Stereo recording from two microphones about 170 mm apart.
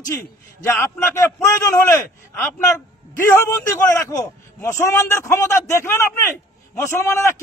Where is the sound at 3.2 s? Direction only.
15° left (ahead or behind).